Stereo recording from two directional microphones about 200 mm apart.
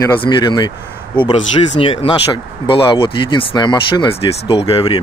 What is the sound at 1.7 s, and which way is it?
Speech, 30° left (ahead or behind).